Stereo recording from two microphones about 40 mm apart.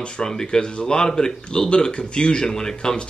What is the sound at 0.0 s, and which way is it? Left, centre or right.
Speech, centre.